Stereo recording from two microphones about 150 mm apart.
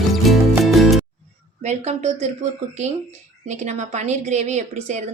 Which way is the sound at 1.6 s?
50° right (ahead or behind).